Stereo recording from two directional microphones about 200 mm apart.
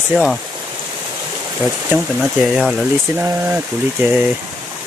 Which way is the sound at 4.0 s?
10° right (ahead or behind).